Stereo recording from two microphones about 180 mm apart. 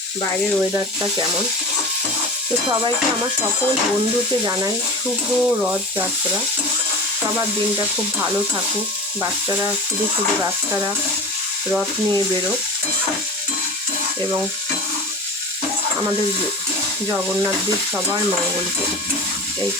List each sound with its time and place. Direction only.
5.4 s speech: 10° right (ahead or behind)